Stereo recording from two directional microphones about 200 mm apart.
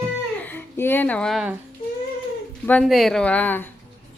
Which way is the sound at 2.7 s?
Centre (ahead or behind).